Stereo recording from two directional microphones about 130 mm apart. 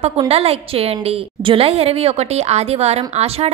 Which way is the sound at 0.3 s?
50° right (ahead or behind).